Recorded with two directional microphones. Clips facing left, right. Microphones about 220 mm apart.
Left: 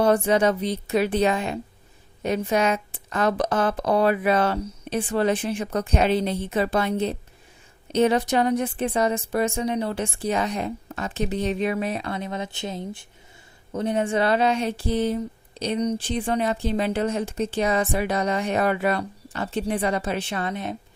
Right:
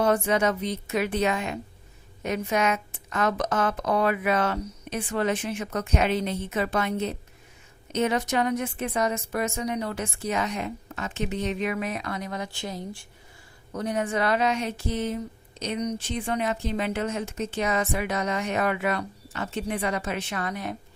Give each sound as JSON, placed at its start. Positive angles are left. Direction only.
{"t": 0.0, "sound": "speech", "side_deg": 30}